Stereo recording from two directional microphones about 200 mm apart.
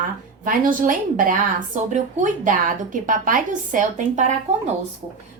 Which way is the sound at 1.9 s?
40° right (ahead or behind).